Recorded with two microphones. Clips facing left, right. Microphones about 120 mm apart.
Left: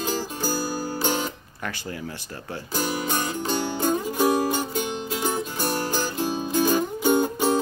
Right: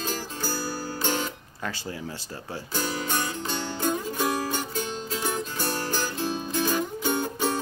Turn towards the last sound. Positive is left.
turn(degrees=10)  # may be behind; listen again after turning